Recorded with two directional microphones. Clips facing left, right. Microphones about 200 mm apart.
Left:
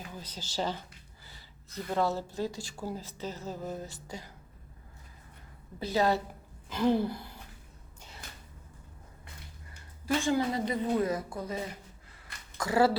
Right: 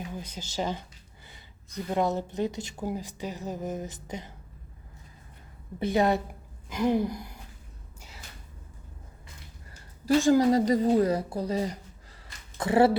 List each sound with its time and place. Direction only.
0.3 s speech: 10° right (ahead or behind)
5.9 s speech: 20° right (ahead or behind)
6.7 s speech: 10° right (ahead or behind)
10.2 s a woman's voice: 40° right (ahead or behind); by 13.0 s 25° right (ahead or behind)